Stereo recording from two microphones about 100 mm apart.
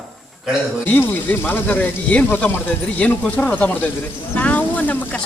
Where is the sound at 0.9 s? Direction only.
20° left (ahead or behind).